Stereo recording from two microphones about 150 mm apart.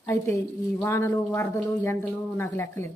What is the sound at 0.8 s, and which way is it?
Speech, 20° left (ahead or behind).